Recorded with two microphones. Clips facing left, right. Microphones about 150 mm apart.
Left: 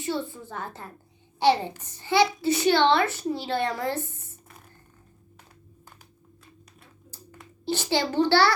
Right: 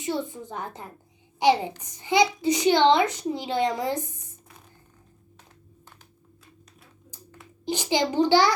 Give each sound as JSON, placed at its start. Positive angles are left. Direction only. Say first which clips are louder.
{"t": 0.0, "sound": "a woman's voice", "louder": "right 1 dB", "side_deg": -20}
{"t": 7.6, "sound": "a child's voice", "louder": "right 1 dB", "side_deg": -15}